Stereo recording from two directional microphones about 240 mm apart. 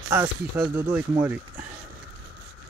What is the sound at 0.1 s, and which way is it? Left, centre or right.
Speech, centre.